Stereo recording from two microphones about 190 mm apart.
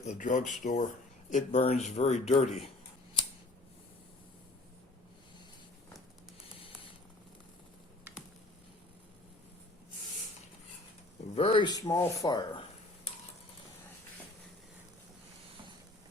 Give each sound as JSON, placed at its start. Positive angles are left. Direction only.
{"t": 0.0, "sound": "speech", "side_deg": 40}
{"t": 11.3, "sound": "speech", "side_deg": 30}